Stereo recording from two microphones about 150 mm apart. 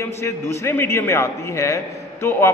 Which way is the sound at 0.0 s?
20° left (ahead or behind).